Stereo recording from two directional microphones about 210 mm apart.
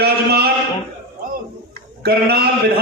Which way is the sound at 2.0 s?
50° right (ahead or behind).